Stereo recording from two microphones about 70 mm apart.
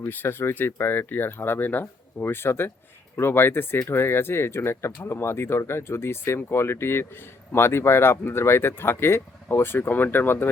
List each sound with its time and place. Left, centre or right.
0.0 s speech: left